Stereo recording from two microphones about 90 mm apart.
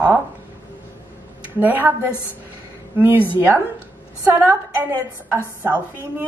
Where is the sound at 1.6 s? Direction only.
20° right (ahead or behind).